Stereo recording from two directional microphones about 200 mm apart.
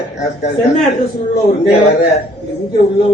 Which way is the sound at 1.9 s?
35° left (ahead or behind).